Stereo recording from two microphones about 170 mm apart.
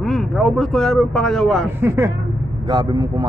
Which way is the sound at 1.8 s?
15° right (ahead or behind).